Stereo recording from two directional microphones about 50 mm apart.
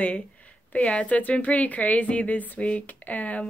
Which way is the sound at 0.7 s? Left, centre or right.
Left.